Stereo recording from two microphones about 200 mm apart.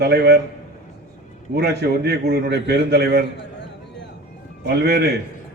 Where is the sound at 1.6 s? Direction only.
55° right (ahead or behind).